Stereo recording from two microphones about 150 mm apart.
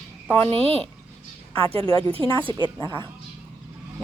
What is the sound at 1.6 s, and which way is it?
A woman's voice, 40° right (ahead or behind).